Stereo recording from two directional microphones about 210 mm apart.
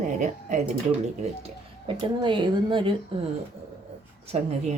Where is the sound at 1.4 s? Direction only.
25° right (ahead or behind).